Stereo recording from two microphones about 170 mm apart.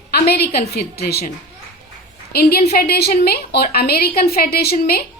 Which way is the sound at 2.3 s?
65° left (ahead or behind).